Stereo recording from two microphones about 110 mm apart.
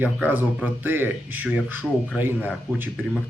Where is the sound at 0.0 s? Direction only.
15° right (ahead or behind).